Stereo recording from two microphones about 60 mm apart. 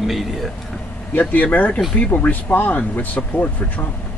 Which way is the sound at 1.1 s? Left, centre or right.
Left.